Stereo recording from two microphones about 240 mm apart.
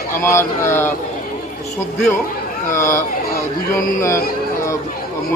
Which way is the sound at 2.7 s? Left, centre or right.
Centre.